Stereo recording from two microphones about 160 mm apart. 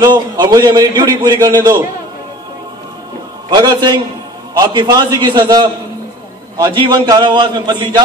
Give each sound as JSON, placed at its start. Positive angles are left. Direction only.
{"t": 0.0, "sound": "a man's voice", "side_deg": -25}
{"t": 3.4, "sound": "a man's voice", "side_deg": -25}